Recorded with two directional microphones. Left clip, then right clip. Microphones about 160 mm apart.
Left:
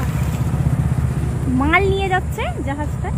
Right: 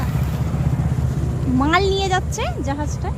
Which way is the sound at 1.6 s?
5° right (ahead or behind).